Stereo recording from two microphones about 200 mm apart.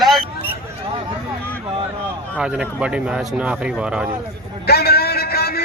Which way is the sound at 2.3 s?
5° right (ahead or behind).